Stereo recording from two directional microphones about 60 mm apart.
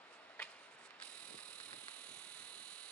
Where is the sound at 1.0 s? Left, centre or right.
Left.